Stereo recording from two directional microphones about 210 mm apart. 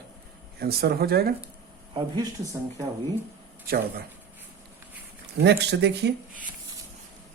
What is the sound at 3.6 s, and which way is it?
Speech, 45° right (ahead or behind).